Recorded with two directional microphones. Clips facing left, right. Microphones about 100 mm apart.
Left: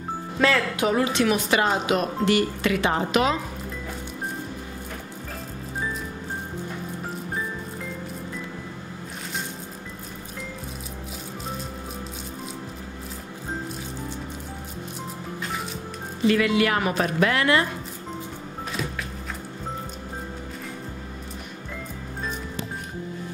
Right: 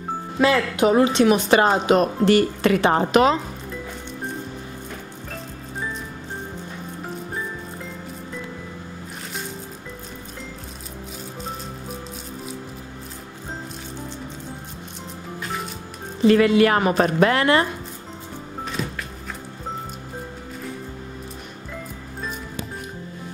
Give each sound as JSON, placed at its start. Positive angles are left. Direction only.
{"t": 0.4, "sound": "speech", "side_deg": -20}
{"t": 16.3, "sound": "speech", "side_deg": -40}